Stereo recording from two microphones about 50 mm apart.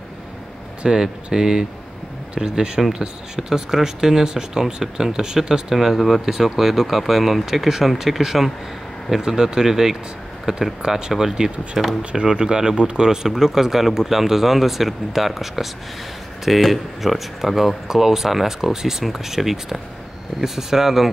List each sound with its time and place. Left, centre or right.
0.8 s speech: centre
12.0 s speech: right